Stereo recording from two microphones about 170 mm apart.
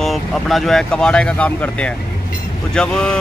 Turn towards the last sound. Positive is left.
turn(degrees=5)  # may be behind; listen again after turning